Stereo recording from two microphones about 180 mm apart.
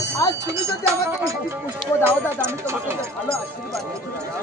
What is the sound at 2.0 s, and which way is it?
Speech, 15° right (ahead or behind).